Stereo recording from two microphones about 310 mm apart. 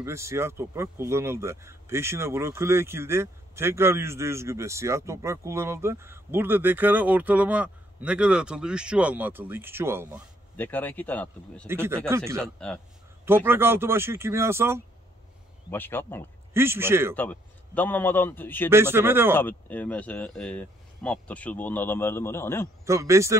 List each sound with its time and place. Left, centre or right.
0.0 s speech: centre
10.5 s speech: centre
11.6 s speech: centre
12.4 s speech: centre
13.2 s speech: centre
15.7 s a man's voice: centre
16.5 s speech: centre
17.1 s a man's voice: centre
18.7 s speech: centre
19.3 s speech: centre
22.8 s speech: centre